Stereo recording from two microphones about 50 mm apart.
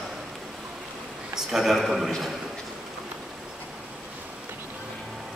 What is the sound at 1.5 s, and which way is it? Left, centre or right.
Speech, centre.